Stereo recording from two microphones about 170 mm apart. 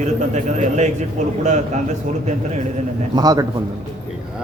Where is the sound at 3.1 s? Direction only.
25° right (ahead or behind).